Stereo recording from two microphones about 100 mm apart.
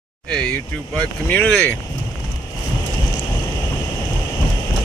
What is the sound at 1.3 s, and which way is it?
Speech, 15° left (ahead or behind).